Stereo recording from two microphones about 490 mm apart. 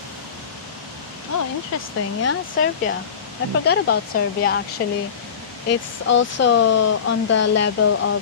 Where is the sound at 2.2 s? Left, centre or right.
Left.